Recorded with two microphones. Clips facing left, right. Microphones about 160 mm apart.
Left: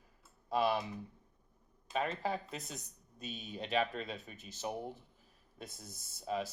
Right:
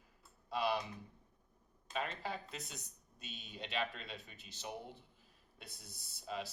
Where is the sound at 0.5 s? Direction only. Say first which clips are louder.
Left 4 dB; 50° left (ahead or behind).